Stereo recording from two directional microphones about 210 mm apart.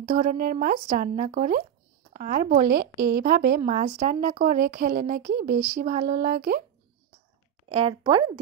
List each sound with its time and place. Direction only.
0.0 s speech: 40° right (ahead or behind)
7.7 s speech: 25° right (ahead or behind)